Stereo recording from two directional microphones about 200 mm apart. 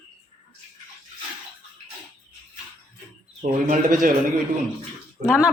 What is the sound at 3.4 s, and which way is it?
Speech, 40° right (ahead or behind).